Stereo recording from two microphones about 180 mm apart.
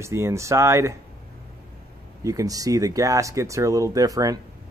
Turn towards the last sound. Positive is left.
turn(degrees=-20)  # may be behind; listen again after turning